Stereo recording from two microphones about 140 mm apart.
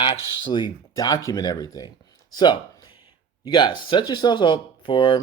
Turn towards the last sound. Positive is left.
turn(degrees=35)  # may be behind; listen again after turning